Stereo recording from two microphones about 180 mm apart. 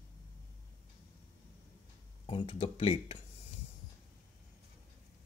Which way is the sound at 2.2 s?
30° left (ahead or behind).